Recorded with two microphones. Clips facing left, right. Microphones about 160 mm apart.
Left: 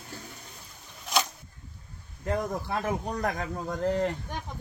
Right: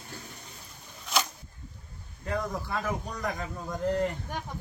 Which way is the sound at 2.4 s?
60° left (ahead or behind).